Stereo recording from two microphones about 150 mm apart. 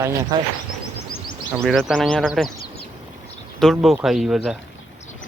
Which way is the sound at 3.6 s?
Centre (ahead or behind).